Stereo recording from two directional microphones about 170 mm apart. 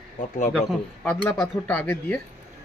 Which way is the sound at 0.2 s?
45° left (ahead or behind).